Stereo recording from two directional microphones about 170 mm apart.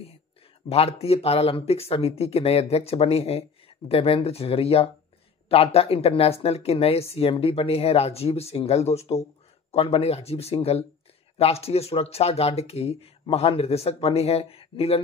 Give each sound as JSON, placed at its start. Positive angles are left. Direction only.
{"t": 0.7, "sound": "speech", "side_deg": 35}